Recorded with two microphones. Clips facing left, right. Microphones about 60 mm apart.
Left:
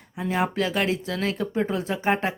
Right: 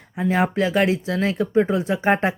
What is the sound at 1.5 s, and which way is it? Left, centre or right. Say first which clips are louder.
Speech: right 6 dB; centre.